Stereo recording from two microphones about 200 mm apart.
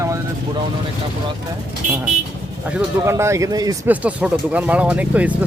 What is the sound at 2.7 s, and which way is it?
Speech, 15° right (ahead or behind).